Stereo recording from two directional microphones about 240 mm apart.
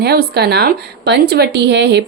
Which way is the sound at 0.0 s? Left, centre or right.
Right.